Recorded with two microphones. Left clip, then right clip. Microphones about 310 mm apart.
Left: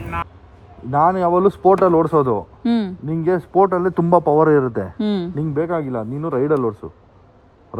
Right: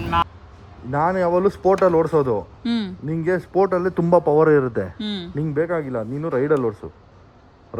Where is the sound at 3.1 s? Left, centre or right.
Centre.